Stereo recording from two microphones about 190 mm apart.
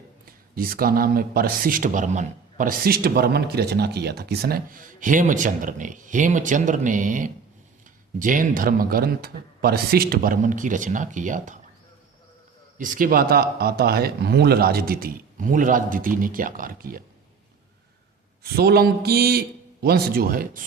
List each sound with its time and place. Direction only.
0.3 s speech: 50° right (ahead or behind)
12.8 s speech: 45° right (ahead or behind)
18.5 s a man's voice: 55° right (ahead or behind)